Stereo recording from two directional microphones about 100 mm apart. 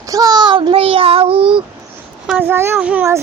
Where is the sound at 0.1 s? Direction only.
40° right (ahead or behind).